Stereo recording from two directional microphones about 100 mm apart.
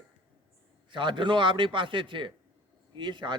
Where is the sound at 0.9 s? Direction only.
55° right (ahead or behind).